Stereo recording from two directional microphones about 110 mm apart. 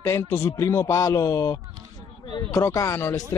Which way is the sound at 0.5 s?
30° left (ahead or behind).